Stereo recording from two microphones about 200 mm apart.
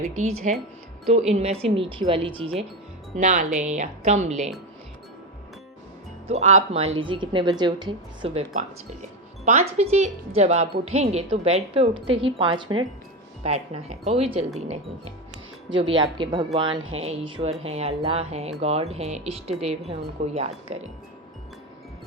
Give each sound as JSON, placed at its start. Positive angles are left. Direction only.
{"t": 0.4, "sound": "a woman's voice", "side_deg": -35}
{"t": 3.2, "sound": "a woman's voice", "side_deg": -40}
{"t": 6.2, "sound": "a woman's voice", "side_deg": -35}
{"t": 16.0, "sound": "a woman's voice", "side_deg": -25}